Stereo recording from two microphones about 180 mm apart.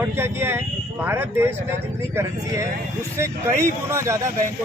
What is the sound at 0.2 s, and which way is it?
Speech, 15° right (ahead or behind).